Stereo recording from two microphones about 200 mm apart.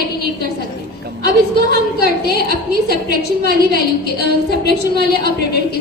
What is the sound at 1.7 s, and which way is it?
A woman's voice, 55° left (ahead or behind).